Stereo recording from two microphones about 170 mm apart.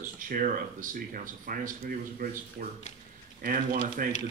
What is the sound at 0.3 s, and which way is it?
Speech, 50° right (ahead or behind).